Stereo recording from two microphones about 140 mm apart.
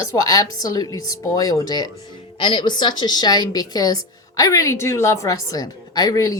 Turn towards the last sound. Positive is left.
turn(degrees=25)  # may be behind; listen again after turning